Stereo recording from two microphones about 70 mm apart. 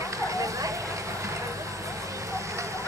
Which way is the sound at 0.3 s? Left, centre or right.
Right.